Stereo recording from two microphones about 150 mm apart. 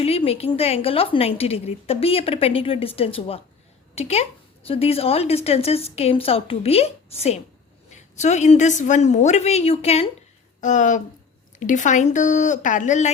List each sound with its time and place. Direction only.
0.0 s a woman's voice: 40° left (ahead or behind)
10.6 s speech: 55° left (ahead or behind)